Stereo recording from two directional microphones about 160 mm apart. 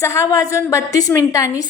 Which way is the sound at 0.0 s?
20° left (ahead or behind).